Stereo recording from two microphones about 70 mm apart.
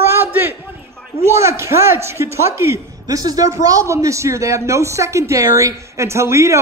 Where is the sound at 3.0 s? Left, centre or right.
Right.